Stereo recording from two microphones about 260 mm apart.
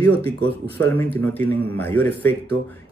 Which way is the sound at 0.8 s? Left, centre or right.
Centre.